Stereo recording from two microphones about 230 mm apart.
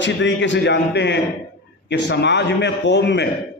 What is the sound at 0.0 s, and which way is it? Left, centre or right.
A man's voice, left.